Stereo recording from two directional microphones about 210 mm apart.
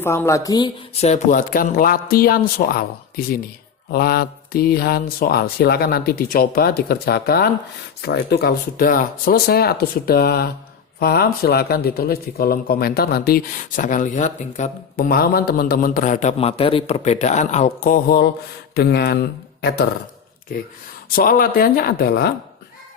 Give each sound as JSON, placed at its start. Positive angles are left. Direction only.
{"t": 0.0, "sound": "speech", "side_deg": 10}
{"t": 1.0, "sound": "speech", "side_deg": 35}
{"t": 21.2, "sound": "speech", "side_deg": 40}